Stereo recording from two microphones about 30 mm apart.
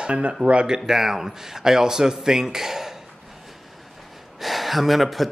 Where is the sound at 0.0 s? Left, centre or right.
Right.